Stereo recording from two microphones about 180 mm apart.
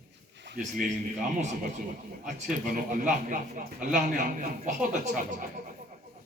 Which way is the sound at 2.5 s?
50° right (ahead or behind).